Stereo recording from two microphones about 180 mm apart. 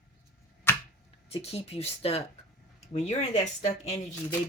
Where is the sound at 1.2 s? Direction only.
35° left (ahead or behind).